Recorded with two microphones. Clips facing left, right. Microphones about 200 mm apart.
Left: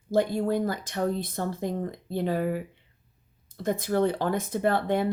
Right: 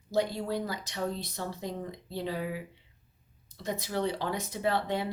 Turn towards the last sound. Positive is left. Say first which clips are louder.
# left 5 dB
turn(degrees=50)  # may be behind; listen again after turning